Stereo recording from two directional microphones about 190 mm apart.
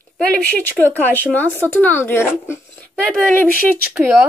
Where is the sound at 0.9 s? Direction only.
10° left (ahead or behind).